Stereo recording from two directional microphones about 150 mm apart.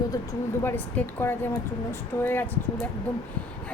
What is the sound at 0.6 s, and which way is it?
Speech, 15° left (ahead or behind).